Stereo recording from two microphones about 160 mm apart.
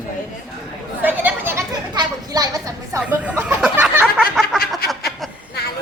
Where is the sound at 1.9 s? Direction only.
25° right (ahead or behind).